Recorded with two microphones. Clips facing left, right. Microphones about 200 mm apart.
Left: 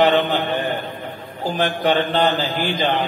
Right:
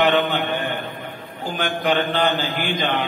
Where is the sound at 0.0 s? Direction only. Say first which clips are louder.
Left 2 dB; 35° left (ahead or behind).